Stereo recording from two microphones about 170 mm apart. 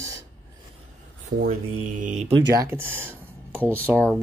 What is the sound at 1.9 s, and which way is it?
Speech, 50° right (ahead or behind).